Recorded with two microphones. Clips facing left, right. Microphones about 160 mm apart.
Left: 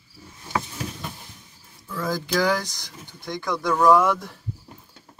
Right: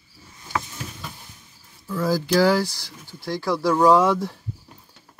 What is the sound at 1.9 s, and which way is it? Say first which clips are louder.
Speech: right 5 dB; 10° right (ahead or behind).